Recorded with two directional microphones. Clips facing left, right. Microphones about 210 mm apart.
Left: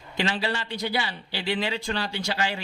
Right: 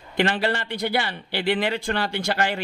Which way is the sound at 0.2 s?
55° right (ahead or behind).